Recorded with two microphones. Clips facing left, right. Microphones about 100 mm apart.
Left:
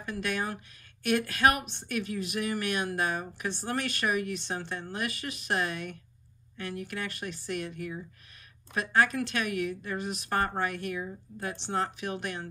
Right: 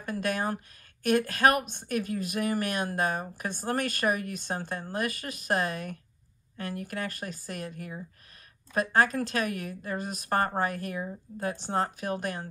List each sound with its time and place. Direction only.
0.0 s a woman's voice: 40° right (ahead or behind)